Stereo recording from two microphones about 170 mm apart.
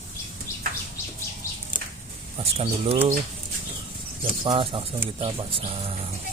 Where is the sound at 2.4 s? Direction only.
35° right (ahead or behind).